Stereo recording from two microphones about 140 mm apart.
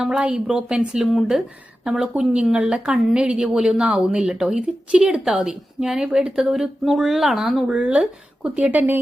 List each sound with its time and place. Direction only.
0.0 s speech: 5° right (ahead or behind)